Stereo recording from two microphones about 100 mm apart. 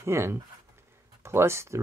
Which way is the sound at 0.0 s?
25° right (ahead or behind).